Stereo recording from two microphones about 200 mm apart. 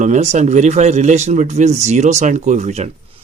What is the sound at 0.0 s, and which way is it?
A man's voice, 35° right (ahead or behind).